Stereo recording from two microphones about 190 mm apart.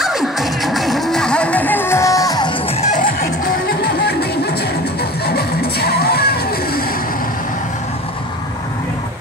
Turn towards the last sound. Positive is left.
turn(degrees=50)  # may be behind; listen again after turning